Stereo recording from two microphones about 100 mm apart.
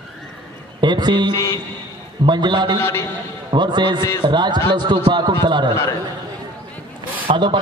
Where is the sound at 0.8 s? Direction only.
50° right (ahead or behind).